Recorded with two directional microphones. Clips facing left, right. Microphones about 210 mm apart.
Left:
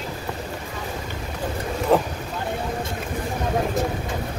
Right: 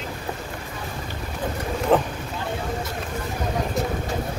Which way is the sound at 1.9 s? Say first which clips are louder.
Even; 5° left (ahead or behind).